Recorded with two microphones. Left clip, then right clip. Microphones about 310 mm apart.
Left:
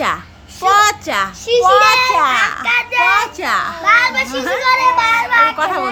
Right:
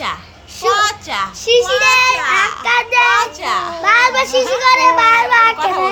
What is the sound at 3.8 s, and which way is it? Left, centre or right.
A child's voice, centre.